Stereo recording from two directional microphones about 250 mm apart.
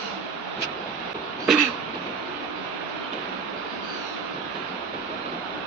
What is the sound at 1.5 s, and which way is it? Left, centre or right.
Throat clearing, centre.